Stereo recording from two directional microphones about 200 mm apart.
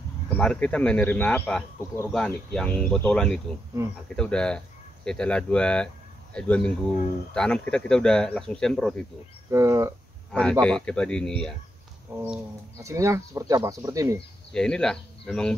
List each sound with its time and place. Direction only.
0.3 s speech: 5° left (ahead or behind)
3.8 s speech: 15° right (ahead or behind)
4.2 s speech: 5° left (ahead or behind)
9.5 s speech: 15° right (ahead or behind)
10.3 s speech: 5° left (ahead or behind)
12.2 s speech: 10° right (ahead or behind)
14.5 s speech: 5° left (ahead or behind)